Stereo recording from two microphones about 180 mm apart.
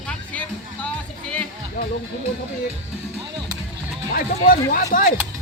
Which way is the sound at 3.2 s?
25° right (ahead or behind).